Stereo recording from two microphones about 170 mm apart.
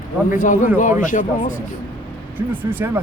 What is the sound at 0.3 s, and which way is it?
Speech, 50° left (ahead or behind).